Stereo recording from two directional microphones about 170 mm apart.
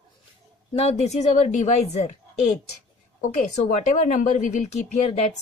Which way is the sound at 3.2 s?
45° left (ahead or behind).